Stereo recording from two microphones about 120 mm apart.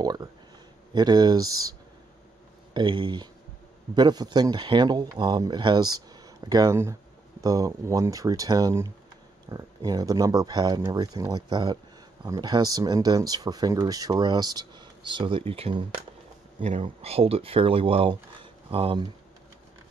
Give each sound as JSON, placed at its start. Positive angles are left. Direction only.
{"t": 0.0, "sound": "speech", "side_deg": -35}
{"t": 16.8, "sound": "speech", "side_deg": -55}